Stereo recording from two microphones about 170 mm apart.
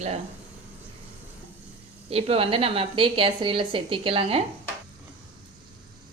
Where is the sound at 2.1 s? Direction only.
35° right (ahead or behind).